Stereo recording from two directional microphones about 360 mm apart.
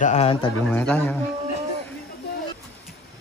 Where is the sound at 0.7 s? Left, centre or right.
Centre.